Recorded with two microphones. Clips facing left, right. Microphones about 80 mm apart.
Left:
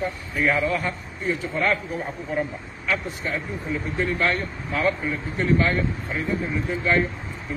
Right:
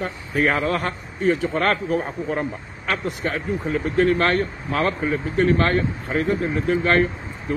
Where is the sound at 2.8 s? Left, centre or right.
Right.